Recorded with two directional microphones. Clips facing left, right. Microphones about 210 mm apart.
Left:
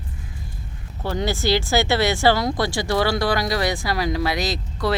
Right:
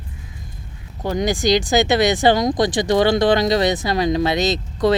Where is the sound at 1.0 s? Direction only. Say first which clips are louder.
Right 4 dB; 15° right (ahead or behind).